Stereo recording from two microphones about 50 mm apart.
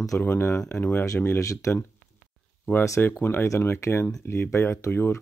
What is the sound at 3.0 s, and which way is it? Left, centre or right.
Speech, left.